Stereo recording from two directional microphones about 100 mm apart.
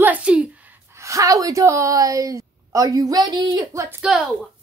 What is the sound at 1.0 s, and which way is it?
A woman's voice, 30° right (ahead or behind).